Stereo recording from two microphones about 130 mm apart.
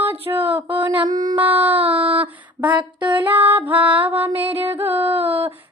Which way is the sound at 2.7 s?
35° right (ahead or behind).